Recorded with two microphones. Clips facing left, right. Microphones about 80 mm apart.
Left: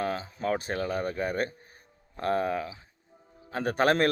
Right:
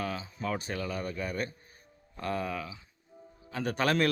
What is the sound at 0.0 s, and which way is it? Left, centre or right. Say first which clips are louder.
A man's voice: left 5 dB; left.